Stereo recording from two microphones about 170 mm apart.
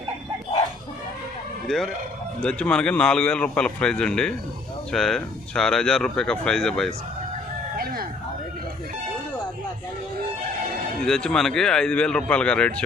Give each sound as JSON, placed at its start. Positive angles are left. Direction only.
{"t": 1.6, "sound": "speech", "side_deg": 0}
{"t": 11.0, "sound": "speech", "side_deg": 5}